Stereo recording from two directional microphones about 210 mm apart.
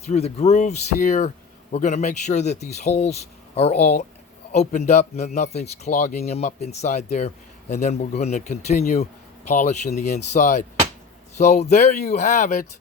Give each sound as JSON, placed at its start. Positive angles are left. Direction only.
{"t": 0.0, "sound": "a man's voice", "side_deg": 30}